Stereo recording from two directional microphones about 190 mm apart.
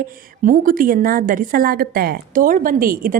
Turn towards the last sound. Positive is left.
turn(degrees=-50)  # may be behind; listen again after turning